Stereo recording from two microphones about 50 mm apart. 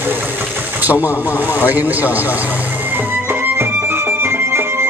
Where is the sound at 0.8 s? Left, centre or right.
Right.